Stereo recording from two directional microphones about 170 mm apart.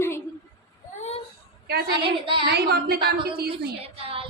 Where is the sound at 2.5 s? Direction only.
70° right (ahead or behind).